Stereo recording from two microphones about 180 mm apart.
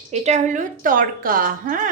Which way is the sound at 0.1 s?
40° right (ahead or behind).